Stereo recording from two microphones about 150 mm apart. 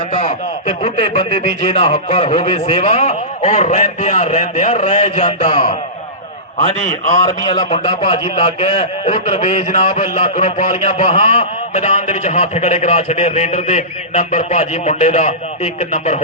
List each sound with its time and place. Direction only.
0.1 s a man's voice: 55° left (ahead or behind)
1.1 s a man's voice: 45° left (ahead or behind)
7.2 s a man's voice: 25° left (ahead or behind); by 16.2 s 50° left (ahead or behind)